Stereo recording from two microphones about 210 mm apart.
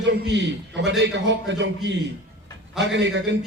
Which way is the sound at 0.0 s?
55° right (ahead or behind).